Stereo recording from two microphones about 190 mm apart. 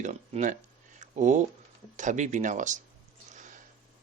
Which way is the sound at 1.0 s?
40° right (ahead or behind).